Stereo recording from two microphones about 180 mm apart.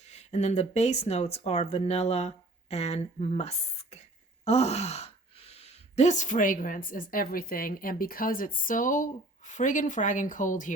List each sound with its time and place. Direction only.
0.0 s speech: 35° left (ahead or behind)